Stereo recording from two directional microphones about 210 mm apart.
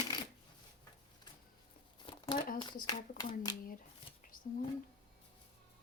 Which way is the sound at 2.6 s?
20° left (ahead or behind).